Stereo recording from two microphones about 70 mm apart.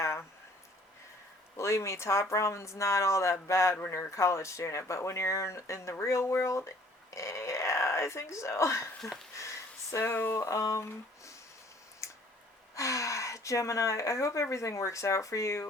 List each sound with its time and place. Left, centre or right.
0.0 s a sound: left
1.5 s speech: left
3.8 s speech: left
4.1 s speech: left
9.4 s a sound: left
10.1 s speech: left
10.4 s speech: left
12.0 s a sound: left
12.7 s speech: left